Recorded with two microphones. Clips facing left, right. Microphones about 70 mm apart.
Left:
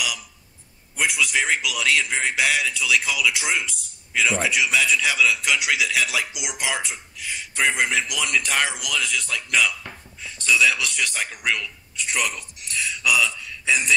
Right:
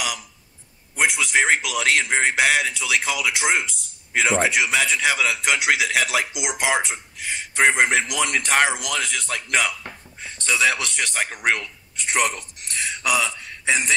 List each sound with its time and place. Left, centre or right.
0.9 s a man's voice: right
6.2 s speech: right
6.6 s a man's voice: right